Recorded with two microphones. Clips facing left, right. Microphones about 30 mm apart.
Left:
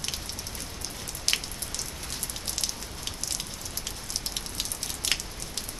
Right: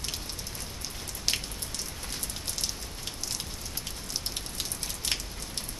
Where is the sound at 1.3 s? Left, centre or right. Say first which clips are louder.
Left 2 dB; centre.